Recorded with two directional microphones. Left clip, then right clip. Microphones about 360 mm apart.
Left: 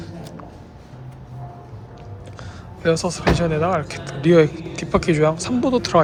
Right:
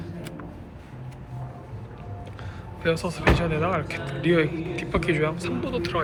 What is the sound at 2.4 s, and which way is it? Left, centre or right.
Power windows, centre.